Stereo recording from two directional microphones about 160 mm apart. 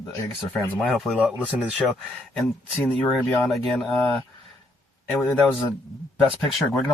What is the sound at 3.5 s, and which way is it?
Speech, centre (ahead or behind).